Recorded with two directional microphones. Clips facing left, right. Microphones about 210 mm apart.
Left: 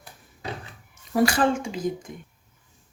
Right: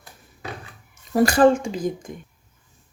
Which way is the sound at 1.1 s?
40° right (ahead or behind).